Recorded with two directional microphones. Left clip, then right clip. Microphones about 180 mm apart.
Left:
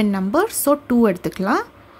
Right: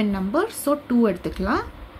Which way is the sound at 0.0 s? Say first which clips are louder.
Left 4 dB; 40° left (ahead or behind).